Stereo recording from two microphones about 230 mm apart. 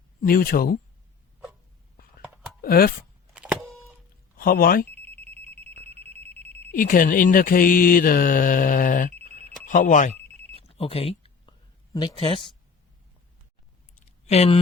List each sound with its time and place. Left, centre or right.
0.2 s mantra: left
2.2 s a sound: centre
2.6 s speech: left
3.3 s a sound: centre
4.4 s speech: left
4.9 s telephone bell ringing: centre
5.7 s alarm: left
6.1 s telephone bell ringing: centre
6.7 s mantra: left
9.2 s telephone bell ringing: left
10.6 s a sound: left
11.9 s speech: left
14.3 s speech: left